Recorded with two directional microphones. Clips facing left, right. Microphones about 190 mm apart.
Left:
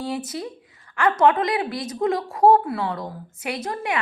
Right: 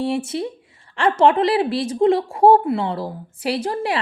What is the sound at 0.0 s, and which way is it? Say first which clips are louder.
Speech: right 6 dB; 25° right (ahead or behind).